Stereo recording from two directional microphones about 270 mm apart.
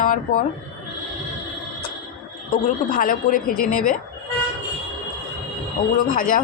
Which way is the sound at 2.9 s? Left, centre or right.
Left.